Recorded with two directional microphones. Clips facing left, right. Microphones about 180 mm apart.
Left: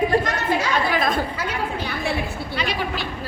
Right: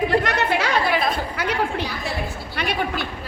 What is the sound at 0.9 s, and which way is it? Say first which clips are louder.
Speech: left 1 dB; 45° left (ahead or behind).